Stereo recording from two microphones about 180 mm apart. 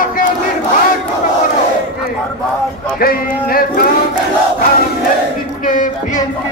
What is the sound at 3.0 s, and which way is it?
Speech, 55° left (ahead or behind).